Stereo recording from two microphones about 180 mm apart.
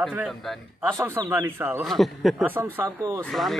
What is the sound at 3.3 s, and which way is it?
Speech, centre (ahead or behind).